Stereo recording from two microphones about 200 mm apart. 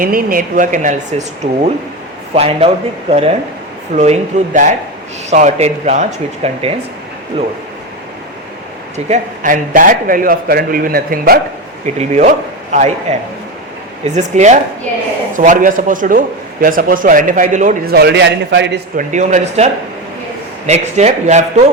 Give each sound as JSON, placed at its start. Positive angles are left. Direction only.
{"t": 0.0, "sound": "a man's voice", "side_deg": -45}
{"t": 9.0, "sound": "a man's voice", "side_deg": -40}
{"t": 11.9, "sound": "a man's voice", "side_deg": -35}
{"t": 18.9, "sound": "speech", "side_deg": -35}